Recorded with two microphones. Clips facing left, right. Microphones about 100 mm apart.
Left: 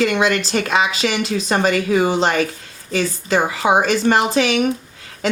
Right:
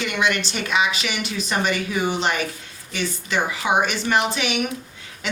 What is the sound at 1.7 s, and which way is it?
Speech, 90° left.